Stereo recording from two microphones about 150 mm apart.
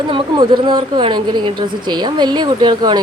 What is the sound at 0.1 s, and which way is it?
A woman's voice, 35° right (ahead or behind).